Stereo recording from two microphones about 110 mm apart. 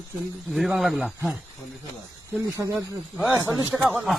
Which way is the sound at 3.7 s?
5° right (ahead or behind).